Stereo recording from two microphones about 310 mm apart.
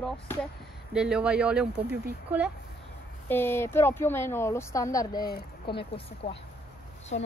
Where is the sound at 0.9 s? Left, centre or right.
Centre.